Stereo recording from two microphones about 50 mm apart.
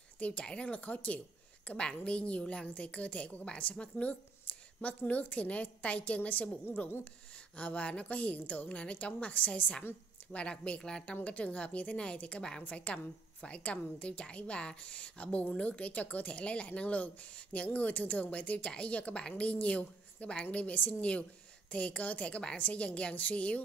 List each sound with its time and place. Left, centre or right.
0.2 s a woman's voice: left